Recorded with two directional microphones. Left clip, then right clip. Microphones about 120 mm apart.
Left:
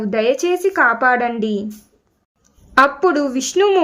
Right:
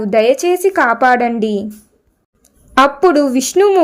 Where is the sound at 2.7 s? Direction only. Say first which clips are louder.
Right 3 dB; 40° right (ahead or behind).